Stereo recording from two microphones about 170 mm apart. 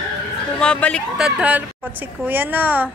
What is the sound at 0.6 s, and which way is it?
Speech, 5° left (ahead or behind).